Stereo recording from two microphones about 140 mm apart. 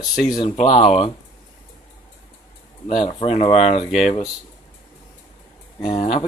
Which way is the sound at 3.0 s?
40° left (ahead or behind).